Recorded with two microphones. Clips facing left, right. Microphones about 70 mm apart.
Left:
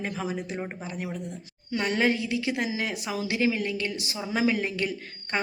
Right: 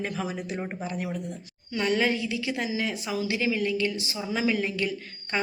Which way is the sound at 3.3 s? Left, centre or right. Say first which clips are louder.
Left 1 dB; left.